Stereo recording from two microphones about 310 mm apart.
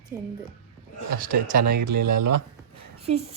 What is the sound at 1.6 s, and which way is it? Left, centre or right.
Speech, right.